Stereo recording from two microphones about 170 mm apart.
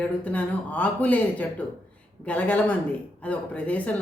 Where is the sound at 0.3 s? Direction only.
10° left (ahead or behind).